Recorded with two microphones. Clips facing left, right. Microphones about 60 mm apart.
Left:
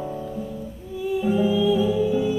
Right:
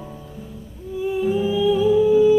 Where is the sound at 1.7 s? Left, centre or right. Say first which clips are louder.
Right 3 dB; right.